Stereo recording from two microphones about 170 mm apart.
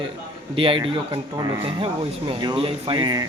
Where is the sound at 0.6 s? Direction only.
30° right (ahead or behind).